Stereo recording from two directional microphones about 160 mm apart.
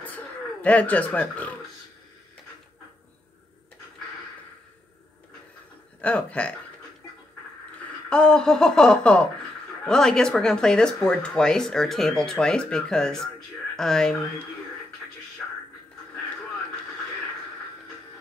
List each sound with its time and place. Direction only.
0.0 s a sound: 10° left (ahead or behind)
5.9 s speech: 10° left (ahead or behind)
8.1 s speech: 5° left (ahead or behind)